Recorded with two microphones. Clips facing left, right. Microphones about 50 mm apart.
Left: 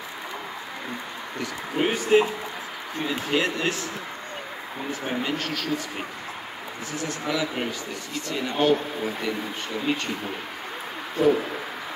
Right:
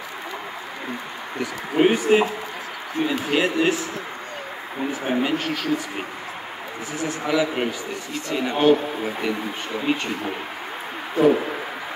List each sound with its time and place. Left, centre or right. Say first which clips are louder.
1.4 s a man's voice: right 7 dB; centre
5.0 s a man's voice: right 5 dB; centre
7.0 s a man's voice: right 5 dB; centre
11.2 s speech: right 3 dB; centre